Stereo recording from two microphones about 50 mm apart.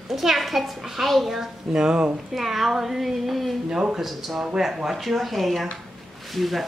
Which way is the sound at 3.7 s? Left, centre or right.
Centre.